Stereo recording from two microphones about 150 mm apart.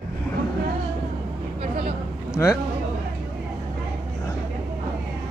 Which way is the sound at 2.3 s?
25° left (ahead or behind).